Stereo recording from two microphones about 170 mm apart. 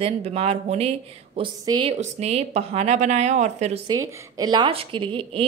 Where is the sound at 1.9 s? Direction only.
40° right (ahead or behind).